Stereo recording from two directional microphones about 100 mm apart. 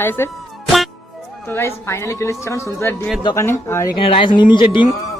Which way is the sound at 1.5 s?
25° left (ahead or behind).